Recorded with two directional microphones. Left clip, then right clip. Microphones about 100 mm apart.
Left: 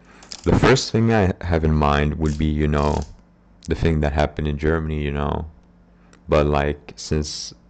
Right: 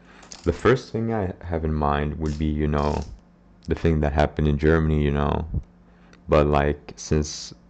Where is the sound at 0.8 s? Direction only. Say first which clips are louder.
Left 7 dB; 30° left (ahead or behind).